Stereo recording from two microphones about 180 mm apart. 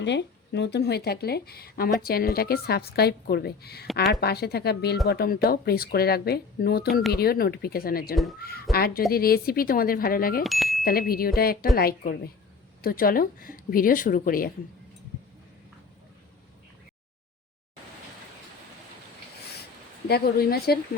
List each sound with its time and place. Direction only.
0.0 s speech: 75° left (ahead or behind); by 8.1 s 55° left (ahead or behind)
8.1 s speech: centre (ahead or behind)
8.4 s speech: 55° left (ahead or behind)
10.4 s speech: centre (ahead or behind)
10.8 s speech: 55° left (ahead or behind)
20.1 s speech: 60° left (ahead or behind)